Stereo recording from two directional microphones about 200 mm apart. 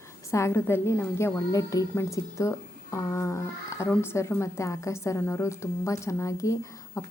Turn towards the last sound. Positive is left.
turn(degrees=15)  # may be behind; listen again after turning